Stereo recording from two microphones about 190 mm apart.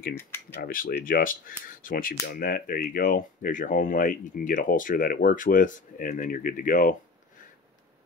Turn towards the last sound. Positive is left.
turn(degrees=45)  # may be behind; listen again after turning